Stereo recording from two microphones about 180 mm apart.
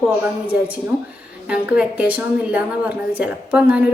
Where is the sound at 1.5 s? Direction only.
5° right (ahead or behind).